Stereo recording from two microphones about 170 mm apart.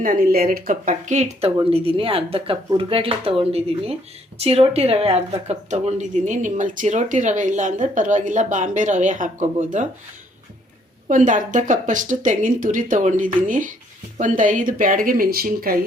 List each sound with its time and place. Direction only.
0.0 s a woman's voice: 55° right (ahead or behind)
11.1 s a woman's voice: 50° right (ahead or behind)